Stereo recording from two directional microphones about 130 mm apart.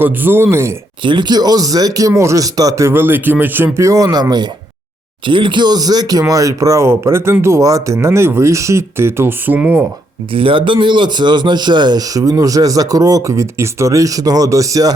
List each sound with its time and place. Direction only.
0.0 s speech: 15° right (ahead or behind)
1.0 s speech: 35° right (ahead or behind); by 9.8 s 15° right (ahead or behind)
10.3 s speech: 40° right (ahead or behind); by 14.9 s 25° right (ahead or behind)